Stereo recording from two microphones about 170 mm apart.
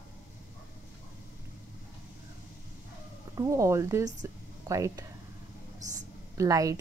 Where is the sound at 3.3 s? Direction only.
20° right (ahead or behind).